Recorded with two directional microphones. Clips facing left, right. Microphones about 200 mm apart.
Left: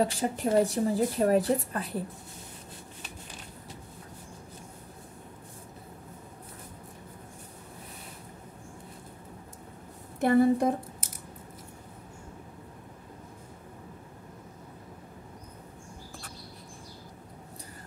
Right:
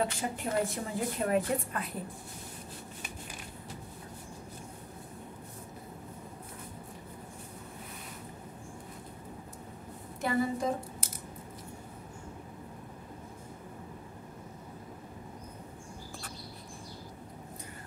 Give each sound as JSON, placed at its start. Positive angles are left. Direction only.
{"t": 0.0, "sound": "speech", "side_deg": 35}
{"t": 10.2, "sound": "a woman's voice", "side_deg": 55}